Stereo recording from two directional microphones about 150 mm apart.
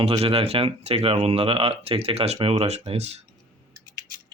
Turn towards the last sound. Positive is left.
turn(degrees=-45)  # may be behind; listen again after turning